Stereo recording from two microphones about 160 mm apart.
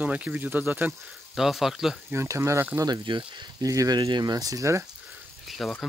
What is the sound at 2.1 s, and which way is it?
Speech, 15° right (ahead or behind).